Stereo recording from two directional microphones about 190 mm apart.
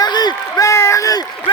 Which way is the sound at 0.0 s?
20° left (ahead or behind).